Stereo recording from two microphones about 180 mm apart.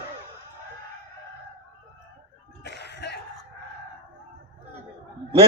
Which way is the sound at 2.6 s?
70° left (ahead or behind).